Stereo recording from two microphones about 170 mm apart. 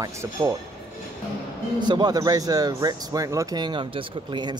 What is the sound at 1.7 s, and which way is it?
Speech, 25° right (ahead or behind).